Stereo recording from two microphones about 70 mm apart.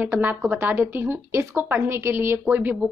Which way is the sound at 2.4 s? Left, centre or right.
Right.